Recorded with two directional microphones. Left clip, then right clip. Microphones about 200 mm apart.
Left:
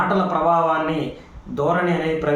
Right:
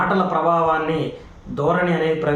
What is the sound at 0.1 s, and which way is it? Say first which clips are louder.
A man's voice: even; 5° right (ahead or behind).